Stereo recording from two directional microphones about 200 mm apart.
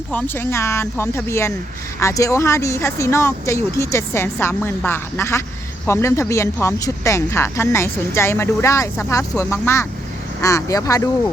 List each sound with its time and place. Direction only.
0.1 s speech: 10° left (ahead or behind)